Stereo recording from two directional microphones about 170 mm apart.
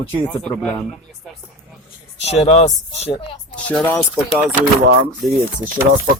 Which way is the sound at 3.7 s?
10° left (ahead or behind).